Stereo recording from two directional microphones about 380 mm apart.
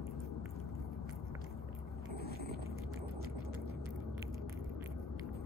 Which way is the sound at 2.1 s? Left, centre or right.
Right.